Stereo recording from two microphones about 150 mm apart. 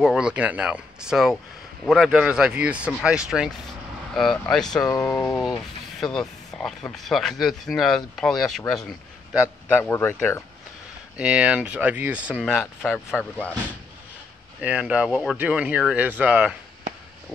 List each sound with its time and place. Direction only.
0.0 s speech: 5° right (ahead or behind)
5.0 s speech: 15° left (ahead or behind)
5.9 s speech: 5° left (ahead or behind)
9.7 s speech: 15° left (ahead or behind)
11.1 s speech: 10° right (ahead or behind)
13.1 s speech: 10° left (ahead or behind)
14.6 s speech: 10° right (ahead or behind)